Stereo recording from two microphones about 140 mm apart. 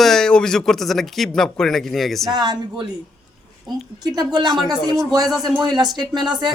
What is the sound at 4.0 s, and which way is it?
Speech, 25° right (ahead or behind).